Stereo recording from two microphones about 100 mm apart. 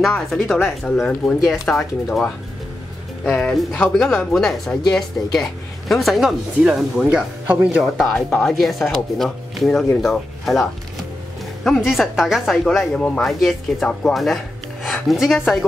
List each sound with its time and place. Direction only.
0.3 s speech: 5° left (ahead or behind)
6.6 s speech: 15° right (ahead or behind)
7.8 s speech: centre (ahead or behind)
12.9 s speech: 10° left (ahead or behind)